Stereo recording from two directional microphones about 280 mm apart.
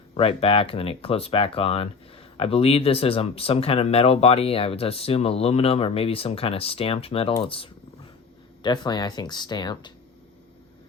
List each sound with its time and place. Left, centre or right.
0.1 s speech: left